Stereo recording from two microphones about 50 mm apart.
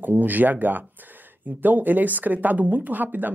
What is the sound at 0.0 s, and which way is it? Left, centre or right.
Speech, right.